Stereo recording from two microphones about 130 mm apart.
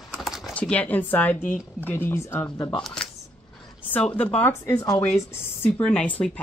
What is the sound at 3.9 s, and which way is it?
Speech, 10° left (ahead or behind).